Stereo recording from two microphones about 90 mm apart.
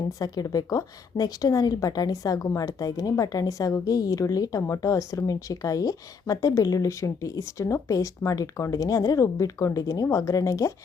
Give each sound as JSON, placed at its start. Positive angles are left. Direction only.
{"t": 0.1, "sound": "a woman's voice", "side_deg": 40}